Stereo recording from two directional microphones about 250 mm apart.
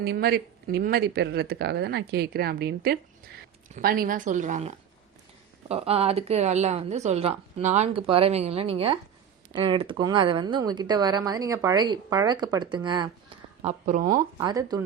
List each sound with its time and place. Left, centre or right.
0.0 s speech: right
14.3 s speech: centre